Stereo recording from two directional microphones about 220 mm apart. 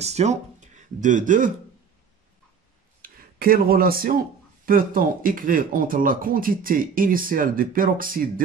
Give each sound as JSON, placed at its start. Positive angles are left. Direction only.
{"t": 0.0, "sound": "speech", "side_deg": -30}
{"t": 3.0, "sound": "speech", "side_deg": -40}